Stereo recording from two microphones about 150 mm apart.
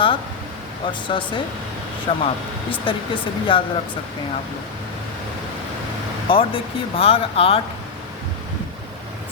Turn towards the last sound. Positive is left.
turn(degrees=40)  # may be behind; listen again after turning